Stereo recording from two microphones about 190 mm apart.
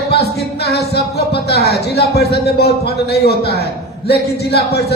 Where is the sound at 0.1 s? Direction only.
60° left (ahead or behind).